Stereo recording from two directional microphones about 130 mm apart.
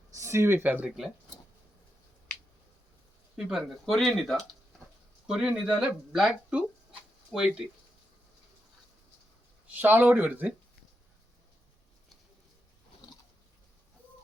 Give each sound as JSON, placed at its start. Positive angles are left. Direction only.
{"t": 0.2, "sound": "speech", "side_deg": -20}
{"t": 0.9, "sound": "speech", "side_deg": 0}
{"t": 3.3, "sound": "speech", "side_deg": -5}
{"t": 9.6, "sound": "speech", "side_deg": -15}